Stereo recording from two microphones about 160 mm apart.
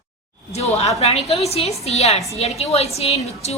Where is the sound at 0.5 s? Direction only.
40° left (ahead or behind).